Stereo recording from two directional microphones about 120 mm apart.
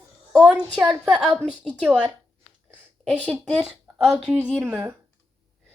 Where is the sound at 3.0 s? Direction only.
10° left (ahead or behind).